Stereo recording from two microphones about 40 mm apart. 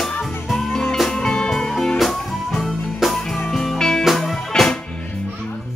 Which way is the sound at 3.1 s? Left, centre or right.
Centre.